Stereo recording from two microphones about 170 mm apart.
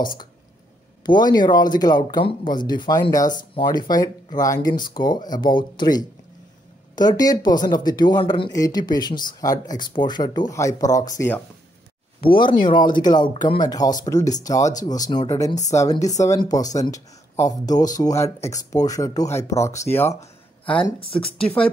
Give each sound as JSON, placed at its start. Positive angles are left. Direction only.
{"t": 1.0, "sound": "speech", "side_deg": 25}
{"t": 12.4, "sound": "speech", "side_deg": 30}